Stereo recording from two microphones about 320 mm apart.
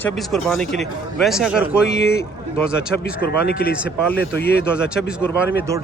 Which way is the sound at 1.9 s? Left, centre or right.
Left.